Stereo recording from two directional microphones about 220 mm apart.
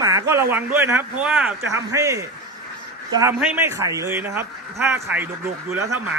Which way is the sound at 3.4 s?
10° right (ahead or behind).